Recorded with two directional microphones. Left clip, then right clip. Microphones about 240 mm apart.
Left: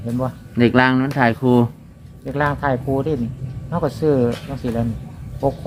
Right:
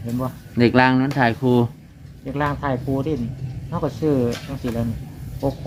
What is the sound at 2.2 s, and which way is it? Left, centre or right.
Speech, left.